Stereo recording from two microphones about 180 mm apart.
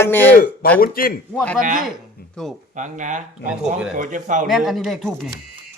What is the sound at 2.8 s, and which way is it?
Speech, 45° right (ahead or behind).